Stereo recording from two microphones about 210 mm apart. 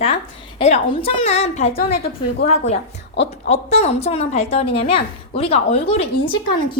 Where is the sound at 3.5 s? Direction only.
30° left (ahead or behind).